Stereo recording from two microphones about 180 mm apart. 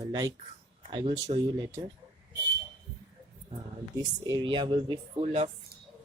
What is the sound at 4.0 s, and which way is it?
Speech, 20° right (ahead or behind).